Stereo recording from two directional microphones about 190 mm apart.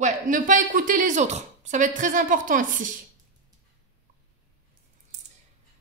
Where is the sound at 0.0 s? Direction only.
45° right (ahead or behind).